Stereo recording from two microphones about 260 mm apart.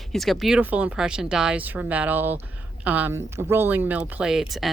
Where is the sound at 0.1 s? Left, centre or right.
Centre.